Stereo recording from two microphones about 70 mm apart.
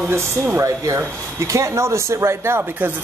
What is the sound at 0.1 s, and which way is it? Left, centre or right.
Speech, right.